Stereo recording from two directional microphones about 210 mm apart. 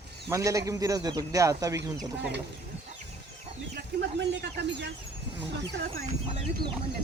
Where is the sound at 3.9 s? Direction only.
60° right (ahead or behind).